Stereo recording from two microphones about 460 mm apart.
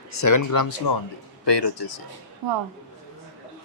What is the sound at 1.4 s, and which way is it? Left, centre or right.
Speech, left.